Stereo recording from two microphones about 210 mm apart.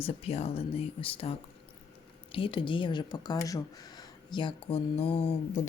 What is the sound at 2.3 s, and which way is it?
Speech, 25° left (ahead or behind).